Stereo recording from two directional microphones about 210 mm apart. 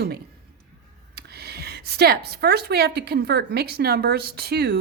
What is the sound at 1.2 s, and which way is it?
Speech, 50° right (ahead or behind).